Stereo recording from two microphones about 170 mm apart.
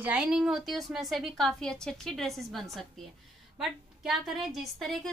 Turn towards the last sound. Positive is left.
turn(degrees=0)  # may be behind; listen again after turning